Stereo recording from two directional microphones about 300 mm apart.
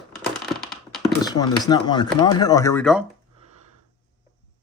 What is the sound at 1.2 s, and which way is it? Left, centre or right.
Speech, centre.